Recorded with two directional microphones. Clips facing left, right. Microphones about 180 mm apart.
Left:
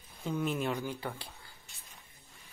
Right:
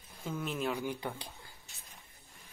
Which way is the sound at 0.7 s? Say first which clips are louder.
Even; 15° right (ahead or behind).